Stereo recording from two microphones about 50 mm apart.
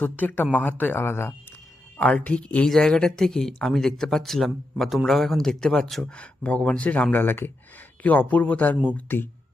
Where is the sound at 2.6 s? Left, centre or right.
Centre.